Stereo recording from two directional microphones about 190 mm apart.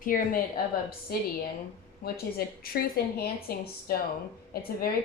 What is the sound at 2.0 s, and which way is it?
A woman's voice, 50° left (ahead or behind).